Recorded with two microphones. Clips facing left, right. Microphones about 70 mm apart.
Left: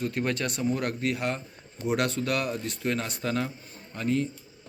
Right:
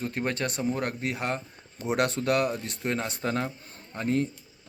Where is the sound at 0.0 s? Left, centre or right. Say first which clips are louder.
Left 1 dB; right.